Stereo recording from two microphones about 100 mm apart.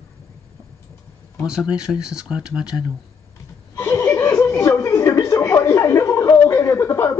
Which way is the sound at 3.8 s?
25° left (ahead or behind).